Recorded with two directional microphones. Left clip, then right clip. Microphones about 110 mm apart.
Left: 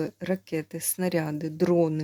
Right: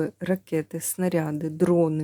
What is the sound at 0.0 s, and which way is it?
Speech, 25° right (ahead or behind).